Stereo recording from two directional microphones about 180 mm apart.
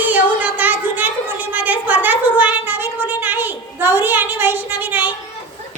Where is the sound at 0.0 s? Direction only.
10° right (ahead or behind).